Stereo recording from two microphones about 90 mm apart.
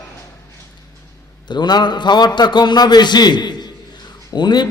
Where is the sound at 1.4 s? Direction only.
55° left (ahead or behind).